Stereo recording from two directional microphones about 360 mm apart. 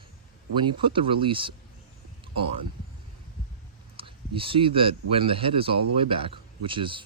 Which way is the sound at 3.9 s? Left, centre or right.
Centre.